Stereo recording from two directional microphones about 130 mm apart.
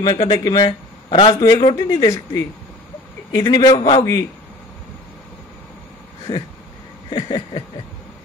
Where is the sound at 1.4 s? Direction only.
30° left (ahead or behind).